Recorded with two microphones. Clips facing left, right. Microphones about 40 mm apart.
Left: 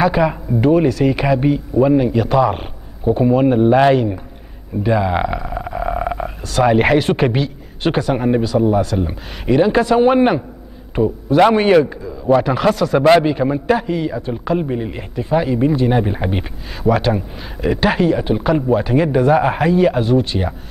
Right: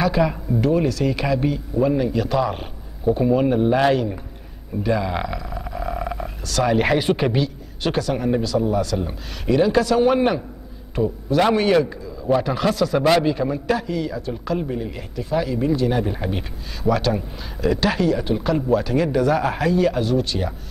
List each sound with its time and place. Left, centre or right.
0.0 s a man's voice: left
12.4 s a man's voice: centre